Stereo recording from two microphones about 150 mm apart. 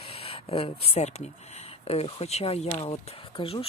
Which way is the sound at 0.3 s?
40° left (ahead or behind).